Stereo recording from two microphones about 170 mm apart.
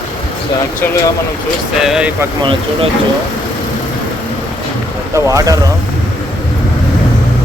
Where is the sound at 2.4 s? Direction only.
30° right (ahead or behind).